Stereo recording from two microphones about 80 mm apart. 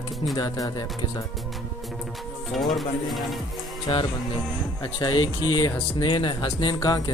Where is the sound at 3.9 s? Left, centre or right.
Left.